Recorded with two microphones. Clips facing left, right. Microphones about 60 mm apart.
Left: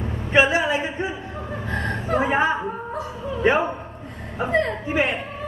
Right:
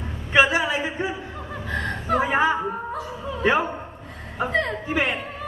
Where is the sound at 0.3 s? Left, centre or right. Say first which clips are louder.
Left 1 dB; left.